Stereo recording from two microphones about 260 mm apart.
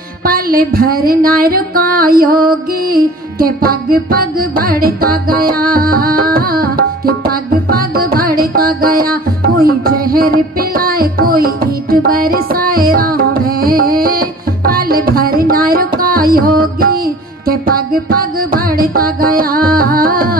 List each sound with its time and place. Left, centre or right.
0.2 s music: right